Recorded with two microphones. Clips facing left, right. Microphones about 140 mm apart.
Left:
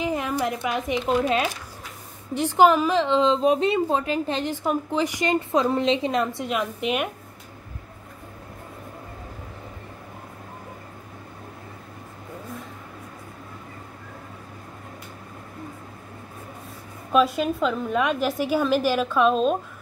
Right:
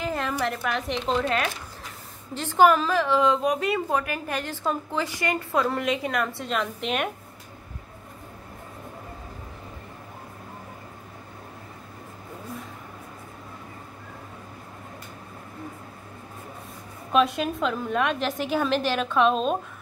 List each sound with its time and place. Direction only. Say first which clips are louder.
0.0 s a sound: left 2 dB; 15° left (ahead or behind)
0.7 s a woman's voice: left 3 dB; 10° left (ahead or behind)
17.1 s a woman's voice: left 2 dB; centre (ahead or behind)